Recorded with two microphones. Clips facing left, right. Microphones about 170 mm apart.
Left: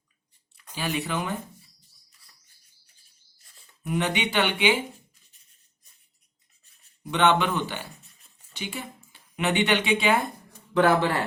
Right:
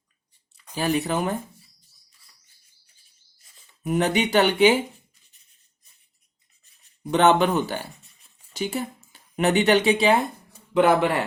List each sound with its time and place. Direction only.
0.5 s a sound: 10° right (ahead or behind)
0.8 s speech: 45° right (ahead or behind)
3.8 s speech: 40° right (ahead or behind)
7.1 s speech: 40° right (ahead or behind)
10.8 s speech: 20° right (ahead or behind)